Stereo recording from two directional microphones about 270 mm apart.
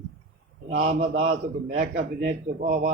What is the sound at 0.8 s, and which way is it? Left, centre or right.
A man's voice, right.